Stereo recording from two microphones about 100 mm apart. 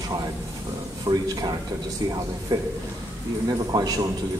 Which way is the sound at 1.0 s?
40° right (ahead or behind).